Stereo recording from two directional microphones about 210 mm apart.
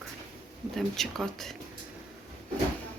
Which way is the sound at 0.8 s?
Centre (ahead or behind).